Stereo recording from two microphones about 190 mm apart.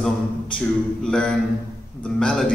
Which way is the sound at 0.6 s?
5° left (ahead or behind).